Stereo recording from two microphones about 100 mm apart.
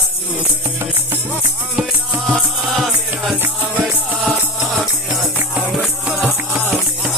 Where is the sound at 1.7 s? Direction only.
Centre (ahead or behind).